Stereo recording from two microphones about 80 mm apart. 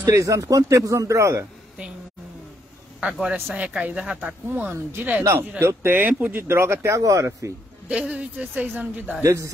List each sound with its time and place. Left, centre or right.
0.1 s speech: right
3.0 s a man's voice: centre
4.5 s speech: right
5.6 s speech: right
7.9 s speech: centre
9.2 s speech: right